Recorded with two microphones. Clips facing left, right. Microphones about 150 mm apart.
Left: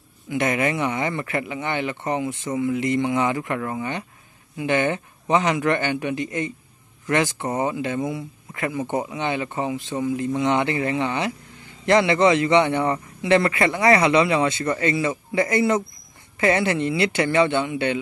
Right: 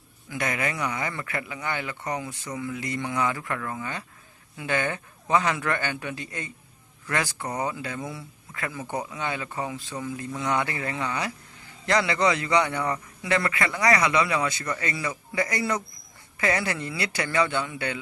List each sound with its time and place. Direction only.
0.3 s speech: 25° left (ahead or behind)